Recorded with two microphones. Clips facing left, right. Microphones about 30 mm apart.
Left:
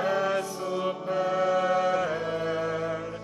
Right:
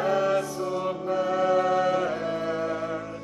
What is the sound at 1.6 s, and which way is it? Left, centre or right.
Music, left.